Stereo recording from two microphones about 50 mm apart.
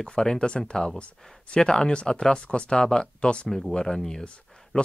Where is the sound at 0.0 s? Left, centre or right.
Centre.